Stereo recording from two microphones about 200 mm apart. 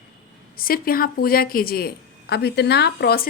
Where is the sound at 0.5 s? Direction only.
45° left (ahead or behind).